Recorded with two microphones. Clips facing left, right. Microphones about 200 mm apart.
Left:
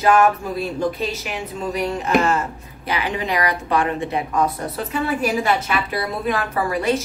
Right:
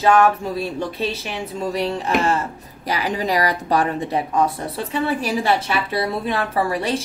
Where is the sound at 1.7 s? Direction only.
30° right (ahead or behind).